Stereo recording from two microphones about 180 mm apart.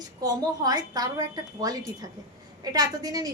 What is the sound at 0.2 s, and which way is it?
A woman's voice, 20° right (ahead or behind).